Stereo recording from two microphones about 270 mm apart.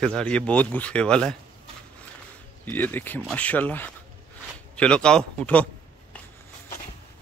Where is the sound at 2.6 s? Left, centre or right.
Centre.